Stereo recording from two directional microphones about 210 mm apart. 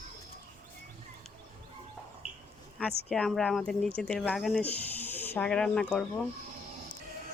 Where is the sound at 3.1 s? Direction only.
5° left (ahead or behind).